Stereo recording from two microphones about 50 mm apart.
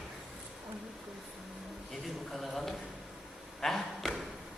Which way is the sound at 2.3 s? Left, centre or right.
Centre.